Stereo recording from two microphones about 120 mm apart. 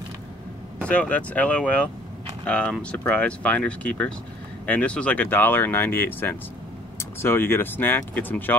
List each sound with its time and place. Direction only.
0.8 s speech: 10° left (ahead or behind)